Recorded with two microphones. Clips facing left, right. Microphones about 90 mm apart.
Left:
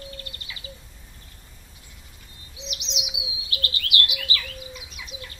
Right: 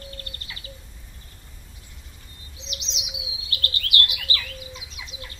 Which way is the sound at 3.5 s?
35° right (ahead or behind).